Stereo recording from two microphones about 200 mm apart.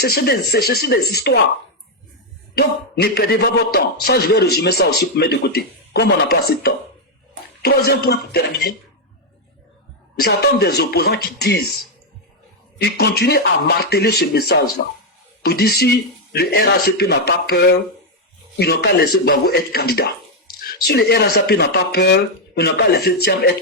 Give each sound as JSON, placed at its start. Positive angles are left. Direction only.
{"t": 0.0, "sound": "speech", "side_deg": 50}
{"t": 2.6, "sound": "speech", "side_deg": 55}
{"t": 10.2, "sound": "speech", "side_deg": 50}
{"t": 12.8, "sound": "speech", "side_deg": 55}